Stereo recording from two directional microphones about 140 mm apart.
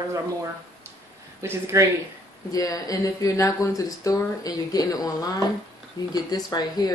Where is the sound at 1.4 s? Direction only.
20° right (ahead or behind).